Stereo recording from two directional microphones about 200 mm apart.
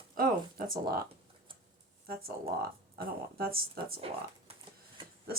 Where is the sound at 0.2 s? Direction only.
45° right (ahead or behind).